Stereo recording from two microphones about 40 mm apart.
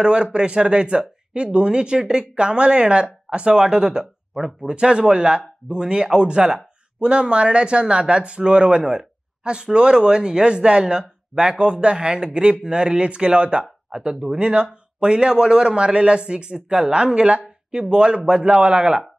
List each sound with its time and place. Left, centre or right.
0.0 s speech: right